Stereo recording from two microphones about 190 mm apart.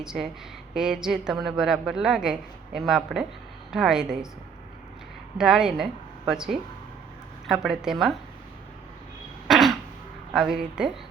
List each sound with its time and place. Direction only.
0.0 s a woman's voice: 5° right (ahead or behind)
5.4 s a woman's voice: 5° right (ahead or behind)
9.5 s throat clearing: centre (ahead or behind)
10.3 s a woman's voice: 5° right (ahead or behind)